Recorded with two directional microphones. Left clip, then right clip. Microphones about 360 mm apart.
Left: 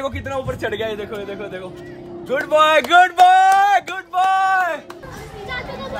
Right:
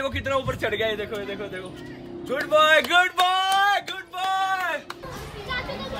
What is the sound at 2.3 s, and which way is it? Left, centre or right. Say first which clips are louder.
A man's voice: left 4 dB; left.